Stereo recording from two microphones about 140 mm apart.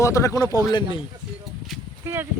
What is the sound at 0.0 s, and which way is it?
Speech, 20° left (ahead or behind).